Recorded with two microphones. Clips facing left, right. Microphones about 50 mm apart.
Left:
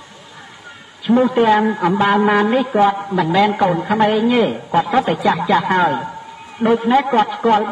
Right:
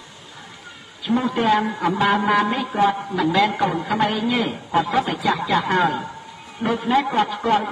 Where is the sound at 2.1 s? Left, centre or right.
Centre.